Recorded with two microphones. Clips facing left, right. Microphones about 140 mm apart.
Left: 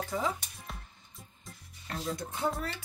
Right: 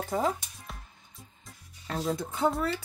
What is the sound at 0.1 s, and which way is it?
Speech, 50° right (ahead or behind).